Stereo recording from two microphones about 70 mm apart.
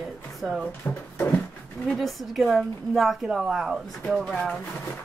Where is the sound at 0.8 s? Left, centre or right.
Left.